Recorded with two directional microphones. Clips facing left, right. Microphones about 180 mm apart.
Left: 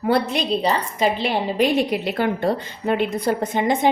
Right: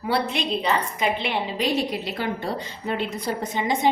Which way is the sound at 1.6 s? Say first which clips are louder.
Left 7 dB; 55° left (ahead or behind).